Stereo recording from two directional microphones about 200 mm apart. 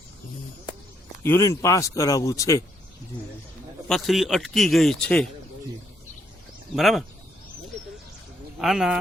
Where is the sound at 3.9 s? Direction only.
Centre (ahead or behind).